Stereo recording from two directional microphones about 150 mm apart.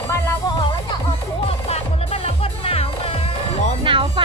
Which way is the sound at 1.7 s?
45° left (ahead or behind).